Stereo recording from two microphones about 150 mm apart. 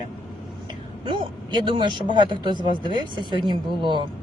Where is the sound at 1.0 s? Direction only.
30° right (ahead or behind).